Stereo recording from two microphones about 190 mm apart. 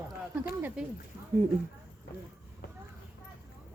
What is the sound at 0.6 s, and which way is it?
Speech, 10° right (ahead or behind).